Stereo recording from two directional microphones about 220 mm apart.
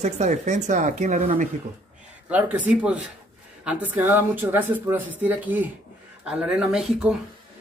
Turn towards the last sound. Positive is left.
turn(degrees=0)  # may be behind; listen again after turning